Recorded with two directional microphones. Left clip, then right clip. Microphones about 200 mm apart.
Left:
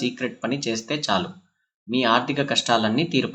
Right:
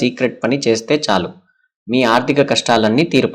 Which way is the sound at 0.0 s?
35° right (ahead or behind).